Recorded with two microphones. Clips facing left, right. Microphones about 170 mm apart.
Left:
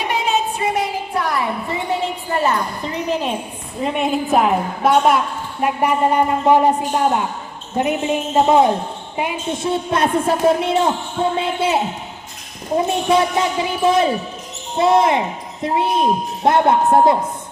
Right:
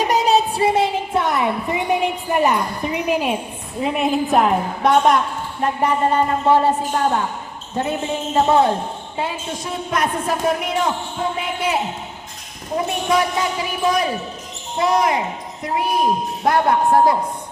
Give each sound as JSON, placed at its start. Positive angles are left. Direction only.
{"t": 0.0, "sound": "a sound", "side_deg": -40}
{"t": 3.8, "sound": "a woman's voice", "side_deg": 0}
{"t": 9.6, "sound": "a woman's voice", "side_deg": 30}